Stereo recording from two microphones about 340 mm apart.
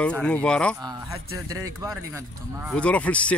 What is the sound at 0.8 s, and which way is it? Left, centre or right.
A man's voice, centre.